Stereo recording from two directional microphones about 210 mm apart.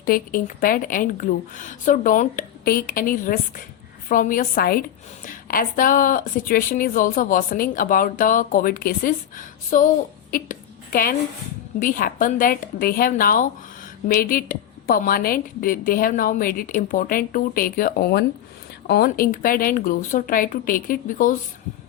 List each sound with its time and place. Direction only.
0.0 s a woman's voice: 40° left (ahead or behind)
10.3 s a sound: 40° left (ahead or behind)
11.8 s a woman's voice: 40° left (ahead or behind)